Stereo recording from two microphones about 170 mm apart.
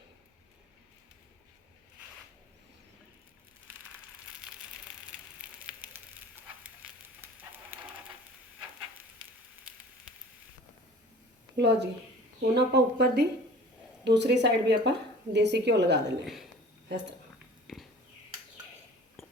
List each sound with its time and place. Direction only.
5.4 s fire: 5° right (ahead or behind)
11.5 s a woman's voice: 90° right
12.5 s speech: 75° right (ahead or behind)
14.0 s a woman's voice: 90° right
16.2 s a sound: centre (ahead or behind)
16.9 s speech: 85° right
17.7 s a sound: centre (ahead or behind)